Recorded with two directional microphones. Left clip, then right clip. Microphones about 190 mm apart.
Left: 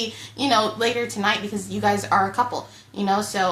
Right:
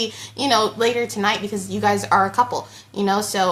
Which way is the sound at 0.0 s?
35° right (ahead or behind).